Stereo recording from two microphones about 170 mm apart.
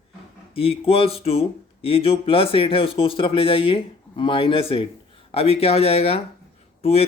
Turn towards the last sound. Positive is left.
turn(degrees=40)  # may be behind; listen again after turning